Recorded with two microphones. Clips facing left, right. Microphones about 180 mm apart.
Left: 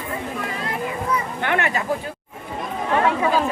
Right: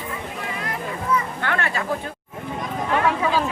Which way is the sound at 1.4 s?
20° left (ahead or behind).